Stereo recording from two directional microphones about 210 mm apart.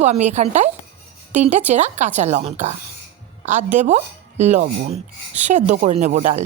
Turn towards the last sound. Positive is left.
turn(degrees=-35)  # may be behind; listen again after turning